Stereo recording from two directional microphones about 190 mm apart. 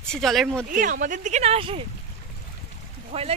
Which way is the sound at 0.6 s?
45° right (ahead or behind).